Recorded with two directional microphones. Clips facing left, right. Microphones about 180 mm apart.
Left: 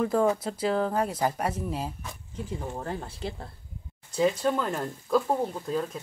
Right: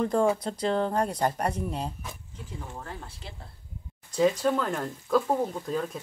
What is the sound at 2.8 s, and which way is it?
Speech, 40° left (ahead or behind).